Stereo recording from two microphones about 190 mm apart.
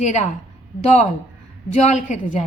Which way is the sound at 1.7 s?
40° left (ahead or behind).